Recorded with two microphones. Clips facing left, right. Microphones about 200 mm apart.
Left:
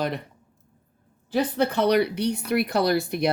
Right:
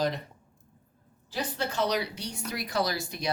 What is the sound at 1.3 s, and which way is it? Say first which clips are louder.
Speech: left 10 dB; 55° left (ahead or behind).